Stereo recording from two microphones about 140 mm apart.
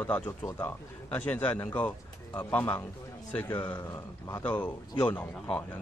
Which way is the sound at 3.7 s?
25° left (ahead or behind).